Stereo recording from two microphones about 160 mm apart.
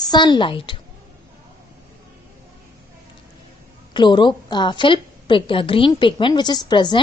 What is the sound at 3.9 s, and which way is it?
A woman's voice, 30° left (ahead or behind).